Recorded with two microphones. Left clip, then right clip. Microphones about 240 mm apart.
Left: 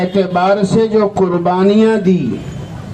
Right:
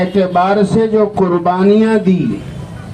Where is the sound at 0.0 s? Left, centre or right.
Left.